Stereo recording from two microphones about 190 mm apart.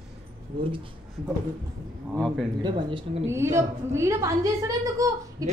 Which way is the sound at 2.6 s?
25° right (ahead or behind).